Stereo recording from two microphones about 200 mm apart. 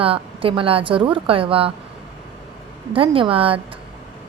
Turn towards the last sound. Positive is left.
turn(degrees=-25)  # may be behind; listen again after turning